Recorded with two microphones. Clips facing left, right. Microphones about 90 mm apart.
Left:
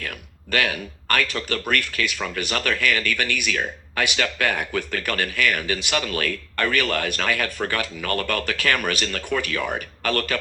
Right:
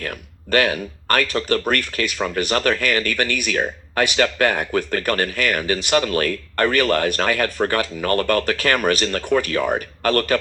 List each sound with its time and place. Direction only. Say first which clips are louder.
0.0 s speech: right 4 dB; 40° right (ahead or behind)